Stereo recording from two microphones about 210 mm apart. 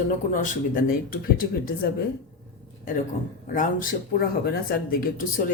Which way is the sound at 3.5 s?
40° left (ahead or behind).